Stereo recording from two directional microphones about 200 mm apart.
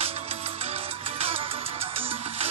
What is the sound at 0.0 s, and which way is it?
Music, 30° right (ahead or behind).